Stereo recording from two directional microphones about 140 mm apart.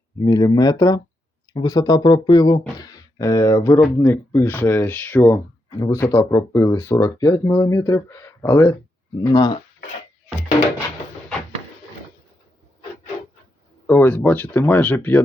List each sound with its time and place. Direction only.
0.2 s speech: 30° left (ahead or behind)
13.8 s speech: 15° left (ahead or behind)